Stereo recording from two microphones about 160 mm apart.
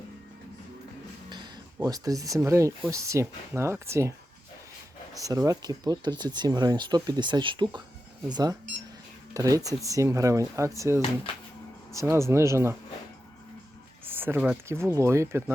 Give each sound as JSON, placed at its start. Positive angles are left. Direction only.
{"t": 1.3, "sound": "speech", "side_deg": -25}
{"t": 5.1, "sound": "speech", "side_deg": -20}
{"t": 14.0, "sound": "speech", "side_deg": -15}